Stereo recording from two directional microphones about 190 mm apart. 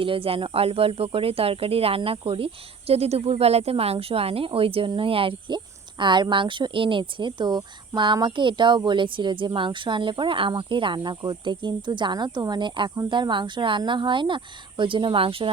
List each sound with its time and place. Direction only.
0.0 s speech: 30° right (ahead or behind)